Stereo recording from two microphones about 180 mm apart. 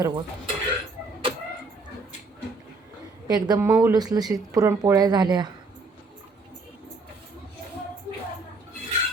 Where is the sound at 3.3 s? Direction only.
20° right (ahead or behind).